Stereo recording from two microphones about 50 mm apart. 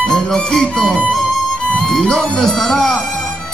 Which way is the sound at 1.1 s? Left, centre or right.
Centre.